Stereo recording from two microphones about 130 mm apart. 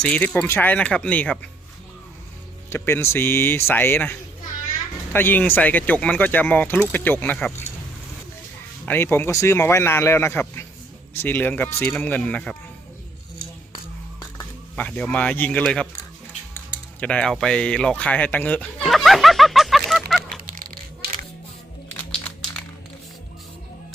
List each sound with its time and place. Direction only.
0.0 s speech: 10° left (ahead or behind)
2.6 s speech: 20° left (ahead or behind)
8.9 s a man's voice: 15° left (ahead or behind)
14.2 s a sound: 15° left (ahead or behind)
15.6 s speech: 5° left (ahead or behind)
18.8 s a sound: centre (ahead or behind)
21.9 s crumpling: 5° left (ahead or behind)